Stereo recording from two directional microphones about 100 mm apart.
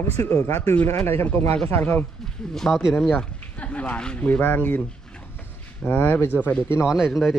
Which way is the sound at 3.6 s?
15° left (ahead or behind).